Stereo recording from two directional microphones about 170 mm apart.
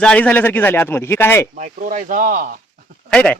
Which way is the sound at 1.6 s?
50° right (ahead or behind).